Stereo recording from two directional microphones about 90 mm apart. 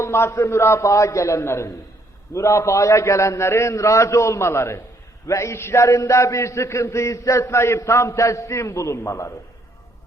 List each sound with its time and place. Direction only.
0.0 s a man's voice: 30° left (ahead or behind)